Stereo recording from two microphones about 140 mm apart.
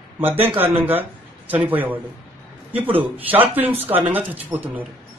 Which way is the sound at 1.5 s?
15° right (ahead or behind).